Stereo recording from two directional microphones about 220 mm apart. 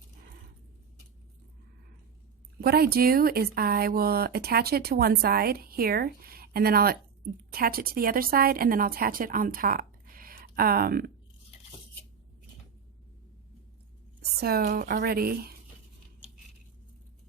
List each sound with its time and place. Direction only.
2.6 s a woman's voice: 45° right (ahead or behind)
14.2 s speech: 45° right (ahead or behind)